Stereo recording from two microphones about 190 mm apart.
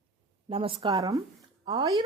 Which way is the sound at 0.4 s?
30° right (ahead or behind).